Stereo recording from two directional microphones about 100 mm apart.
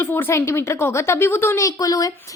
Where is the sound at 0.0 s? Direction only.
25° left (ahead or behind).